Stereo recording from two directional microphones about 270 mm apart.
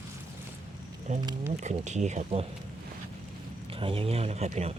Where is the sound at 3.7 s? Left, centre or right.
Centre.